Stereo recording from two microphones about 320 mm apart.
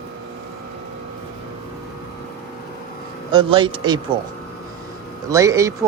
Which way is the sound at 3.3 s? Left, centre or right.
Centre.